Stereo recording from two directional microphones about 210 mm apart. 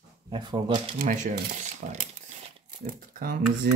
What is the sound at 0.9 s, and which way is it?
Speech, 35° right (ahead or behind).